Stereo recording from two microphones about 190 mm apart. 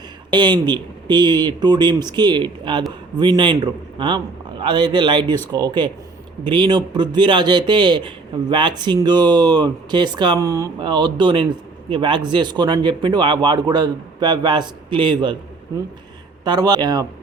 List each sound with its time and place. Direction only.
0.3 s a man's voice: 25° right (ahead or behind)
16.4 s a man's voice: 20° right (ahead or behind)